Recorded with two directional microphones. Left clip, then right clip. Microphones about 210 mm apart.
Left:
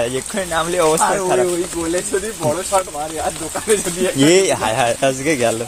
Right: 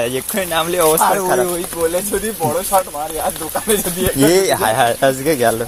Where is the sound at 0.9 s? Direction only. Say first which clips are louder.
Right 1 dB; 35° right (ahead or behind).